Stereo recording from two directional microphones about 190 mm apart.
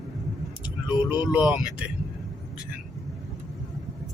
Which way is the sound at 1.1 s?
5° right (ahead or behind).